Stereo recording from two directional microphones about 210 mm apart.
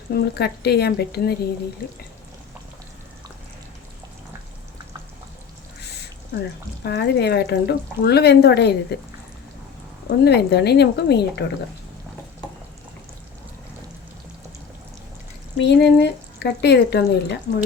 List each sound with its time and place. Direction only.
0.1 s speech: 50° left (ahead or behind)
6.8 s speech: 55° left (ahead or behind)
10.2 s speech: 50° left (ahead or behind)
15.5 s speech: 55° left (ahead or behind)